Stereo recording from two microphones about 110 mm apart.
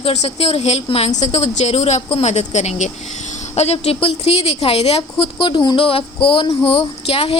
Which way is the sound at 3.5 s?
70° left (ahead or behind).